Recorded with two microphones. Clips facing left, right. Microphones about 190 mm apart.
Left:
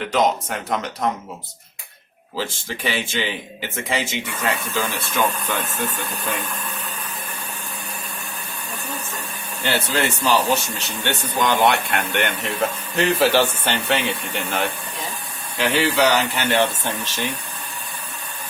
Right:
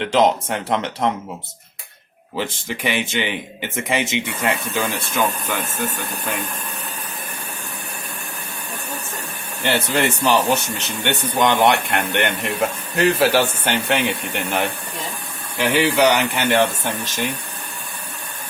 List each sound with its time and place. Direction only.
0.1 s speech: 30° right (ahead or behind)
2.3 s speech: 20° right (ahead or behind)
9.6 s speech: 15° right (ahead or behind)